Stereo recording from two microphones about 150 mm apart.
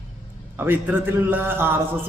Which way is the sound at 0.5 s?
15° right (ahead or behind).